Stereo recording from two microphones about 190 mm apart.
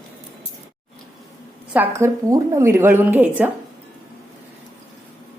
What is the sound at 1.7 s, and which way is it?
A woman's voice, 10° right (ahead or behind).